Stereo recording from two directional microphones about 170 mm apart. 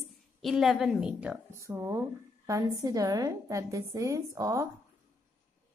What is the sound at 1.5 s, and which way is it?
A woman's voice, 15° right (ahead or behind).